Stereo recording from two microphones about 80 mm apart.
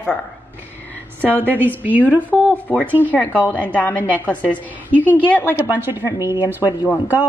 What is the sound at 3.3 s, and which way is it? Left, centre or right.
Speech, right.